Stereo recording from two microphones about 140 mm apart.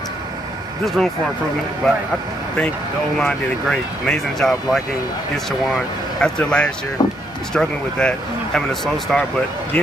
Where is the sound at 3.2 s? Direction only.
5° left (ahead or behind).